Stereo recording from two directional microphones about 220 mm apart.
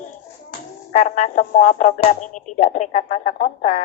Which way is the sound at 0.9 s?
35° left (ahead or behind).